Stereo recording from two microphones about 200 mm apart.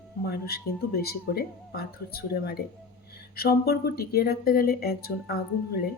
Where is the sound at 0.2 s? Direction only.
50° left (ahead or behind).